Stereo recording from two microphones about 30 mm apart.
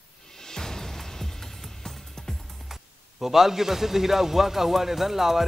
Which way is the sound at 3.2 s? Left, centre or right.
Centre.